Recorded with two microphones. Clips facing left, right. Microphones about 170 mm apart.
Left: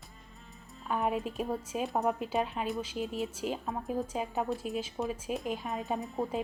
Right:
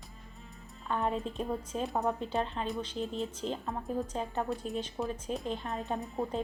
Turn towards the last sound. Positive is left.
turn(degrees=0)  # may be behind; listen again after turning